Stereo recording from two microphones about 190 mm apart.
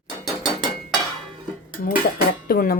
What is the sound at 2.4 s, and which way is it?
Speech, 55° left (ahead or behind).